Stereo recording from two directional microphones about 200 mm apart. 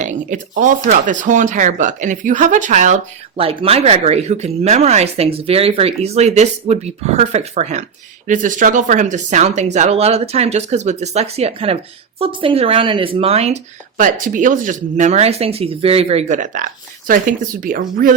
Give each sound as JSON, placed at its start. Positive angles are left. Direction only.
{"t": 0.0, "sound": "speech", "side_deg": -40}